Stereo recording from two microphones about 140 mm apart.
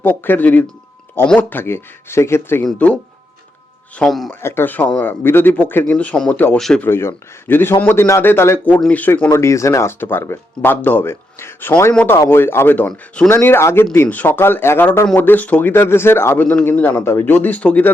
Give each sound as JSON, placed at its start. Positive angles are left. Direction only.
{"t": 0.0, "sound": "a man's voice", "side_deg": 15}
{"t": 4.4, "sound": "a man's voice", "side_deg": 15}
{"t": 6.8, "sound": "a man's voice", "side_deg": 20}